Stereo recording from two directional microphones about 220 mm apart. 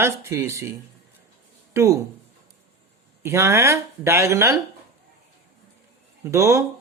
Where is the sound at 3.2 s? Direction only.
10° right (ahead or behind).